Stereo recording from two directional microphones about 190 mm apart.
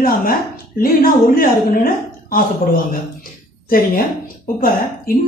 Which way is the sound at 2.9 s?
50° left (ahead or behind).